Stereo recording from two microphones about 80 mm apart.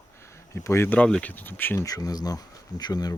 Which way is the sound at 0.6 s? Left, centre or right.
Left.